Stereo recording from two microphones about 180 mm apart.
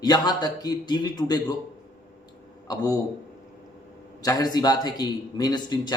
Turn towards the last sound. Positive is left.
turn(degrees=20)  # may be behind; listen again after turning